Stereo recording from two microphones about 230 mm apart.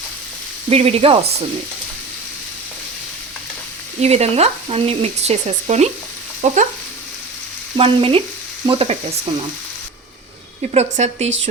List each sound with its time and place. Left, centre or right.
0.7 s frying: right
4.0 s frying: right
7.8 s frying: right
10.7 s frying: right